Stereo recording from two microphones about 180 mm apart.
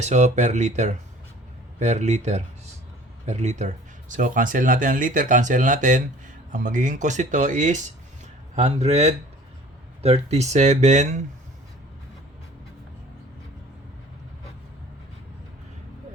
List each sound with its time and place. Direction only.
0.0 s speech: 40° right (ahead or behind)